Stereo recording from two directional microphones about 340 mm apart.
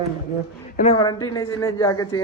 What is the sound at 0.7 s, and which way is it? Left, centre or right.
Speech, centre.